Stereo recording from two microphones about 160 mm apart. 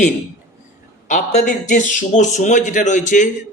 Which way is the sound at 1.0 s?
50° left (ahead or behind).